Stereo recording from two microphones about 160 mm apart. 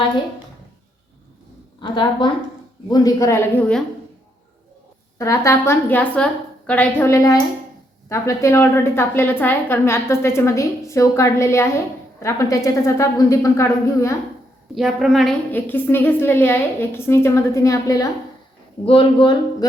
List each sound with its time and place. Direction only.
1.8 s a woman's voice: 30° left (ahead or behind)
5.1 s a woman's voice: 20° left (ahead or behind)
14.8 s a woman's voice: centre (ahead or behind)
15.5 s a woman's voice: 10° left (ahead or behind)
18.9 s speech: 30° left (ahead or behind)